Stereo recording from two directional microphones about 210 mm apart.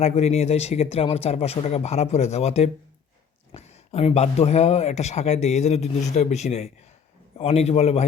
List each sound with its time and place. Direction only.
0.0 s a man's voice: 30° left (ahead or behind)